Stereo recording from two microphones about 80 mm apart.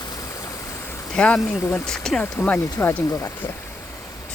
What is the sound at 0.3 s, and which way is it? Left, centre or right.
Stream, left.